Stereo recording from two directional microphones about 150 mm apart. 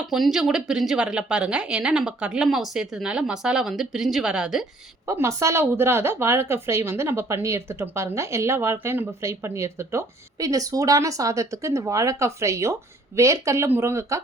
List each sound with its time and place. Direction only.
0.1 s a woman's voice: 5° right (ahead or behind)
5.0 s speech: 20° right (ahead or behind)